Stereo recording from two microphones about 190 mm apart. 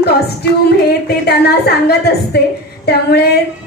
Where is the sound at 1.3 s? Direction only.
60° left (ahead or behind).